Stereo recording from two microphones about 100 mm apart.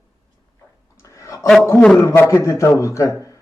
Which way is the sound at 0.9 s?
30° left (ahead or behind).